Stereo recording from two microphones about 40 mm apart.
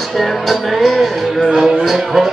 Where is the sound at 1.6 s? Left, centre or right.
Centre.